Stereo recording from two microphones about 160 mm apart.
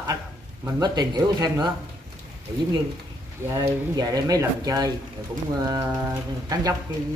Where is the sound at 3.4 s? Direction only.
20° right (ahead or behind).